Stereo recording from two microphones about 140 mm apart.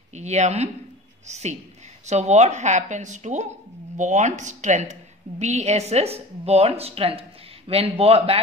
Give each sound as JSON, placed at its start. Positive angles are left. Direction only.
{"t": 0.1, "sound": "a woman's voice", "side_deg": -55}